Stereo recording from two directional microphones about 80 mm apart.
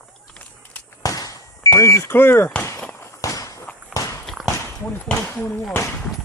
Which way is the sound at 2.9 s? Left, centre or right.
Left.